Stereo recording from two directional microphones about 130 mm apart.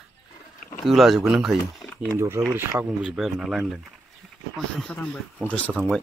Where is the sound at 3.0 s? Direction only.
5° right (ahead or behind).